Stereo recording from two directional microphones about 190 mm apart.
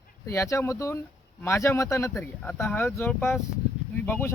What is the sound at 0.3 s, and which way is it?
Speech, 15° left (ahead or behind).